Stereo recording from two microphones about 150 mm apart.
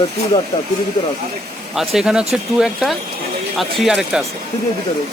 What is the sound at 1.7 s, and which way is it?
Speech, 5° right (ahead or behind).